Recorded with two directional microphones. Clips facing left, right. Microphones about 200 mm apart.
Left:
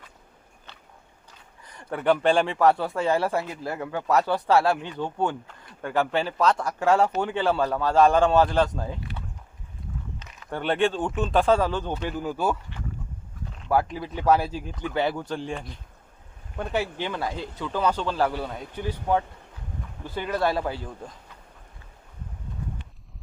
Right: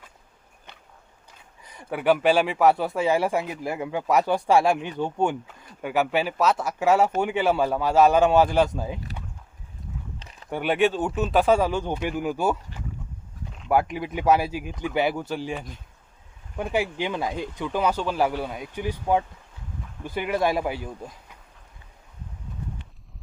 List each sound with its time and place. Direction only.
1.6 s speech: 10° right (ahead or behind)
10.2 s a sound: 30° right (ahead or behind)
10.5 s speech: 10° right (ahead or behind)
13.7 s speech: 15° right (ahead or behind)